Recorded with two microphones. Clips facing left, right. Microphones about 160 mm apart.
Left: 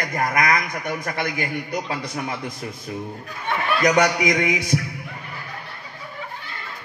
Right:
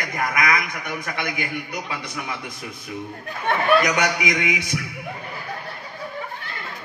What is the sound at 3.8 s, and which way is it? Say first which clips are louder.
Speech: left 4 dB; 35° left (ahead or behind).